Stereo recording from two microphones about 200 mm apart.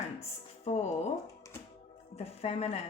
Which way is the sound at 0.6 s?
35° left (ahead or behind).